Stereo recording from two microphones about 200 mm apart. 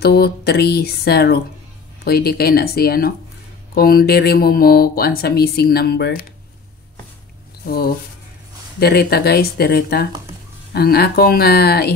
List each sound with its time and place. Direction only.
0.0 s speech: 50° left (ahead or behind)
7.6 s speech: 50° left (ahead or behind)